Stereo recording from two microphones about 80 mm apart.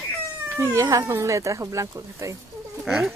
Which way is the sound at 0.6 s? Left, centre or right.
Right.